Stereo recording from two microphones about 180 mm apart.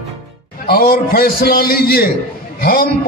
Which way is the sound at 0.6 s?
55° left (ahead or behind).